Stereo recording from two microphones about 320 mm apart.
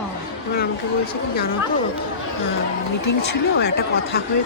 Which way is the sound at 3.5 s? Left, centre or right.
Left.